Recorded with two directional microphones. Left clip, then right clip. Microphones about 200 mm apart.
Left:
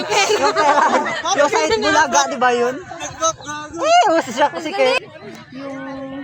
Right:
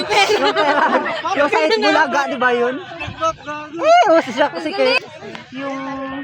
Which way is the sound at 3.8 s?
40° right (ahead or behind).